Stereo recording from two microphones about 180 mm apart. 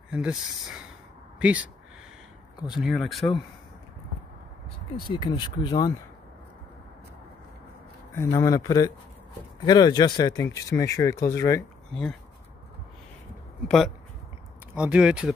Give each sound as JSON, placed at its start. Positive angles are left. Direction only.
{"t": 0.1, "sound": "speech", "side_deg": -5}
{"t": 2.8, "sound": "speech", "side_deg": 0}
{"t": 4.9, "sound": "speech", "side_deg": 25}
{"t": 8.1, "sound": "speech", "side_deg": 15}
{"t": 13.7, "sound": "speech", "side_deg": 0}